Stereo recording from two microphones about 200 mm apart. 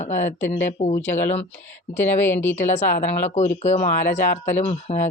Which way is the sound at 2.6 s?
35° left (ahead or behind).